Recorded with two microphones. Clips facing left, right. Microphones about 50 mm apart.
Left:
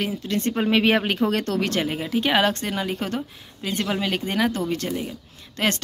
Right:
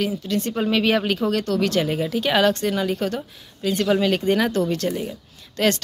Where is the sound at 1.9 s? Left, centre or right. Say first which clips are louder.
Right 1 dB; centre.